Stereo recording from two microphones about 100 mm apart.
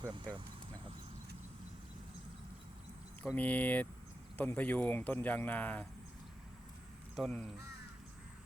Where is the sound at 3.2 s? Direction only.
15° left (ahead or behind).